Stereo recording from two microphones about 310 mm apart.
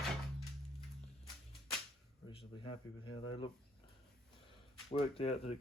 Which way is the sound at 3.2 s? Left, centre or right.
Centre.